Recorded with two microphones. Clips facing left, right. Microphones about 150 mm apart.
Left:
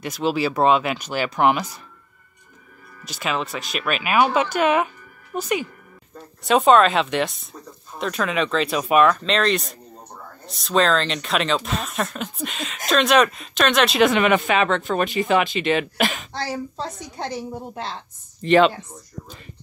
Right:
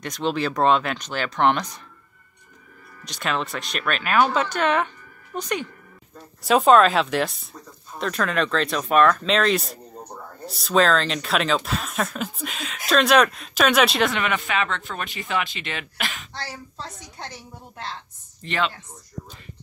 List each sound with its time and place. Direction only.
0.0 s speech: 5° left (ahead or behind)
3.1 s a woman's voice: centre (ahead or behind); by 17.9 s 20° left (ahead or behind)